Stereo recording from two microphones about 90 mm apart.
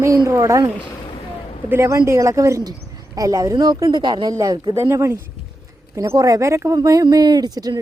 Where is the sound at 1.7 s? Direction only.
30° right (ahead or behind); by 4.3 s 55° right (ahead or behind).